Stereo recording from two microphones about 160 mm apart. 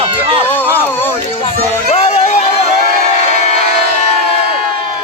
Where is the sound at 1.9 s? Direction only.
45° left (ahead or behind).